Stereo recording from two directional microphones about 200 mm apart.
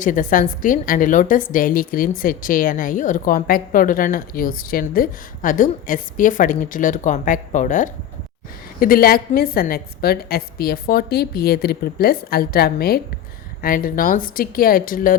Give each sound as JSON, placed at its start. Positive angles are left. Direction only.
{"t": 0.0, "sound": "a woman's voice", "side_deg": 40}